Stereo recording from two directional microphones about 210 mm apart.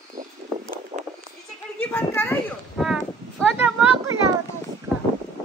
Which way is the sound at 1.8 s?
10° left (ahead or behind).